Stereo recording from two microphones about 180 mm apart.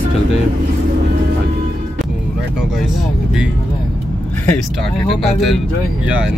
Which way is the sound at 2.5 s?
Centre (ahead or behind).